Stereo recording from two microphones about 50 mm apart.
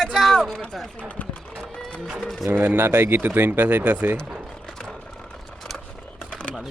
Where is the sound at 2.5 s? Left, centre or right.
Right.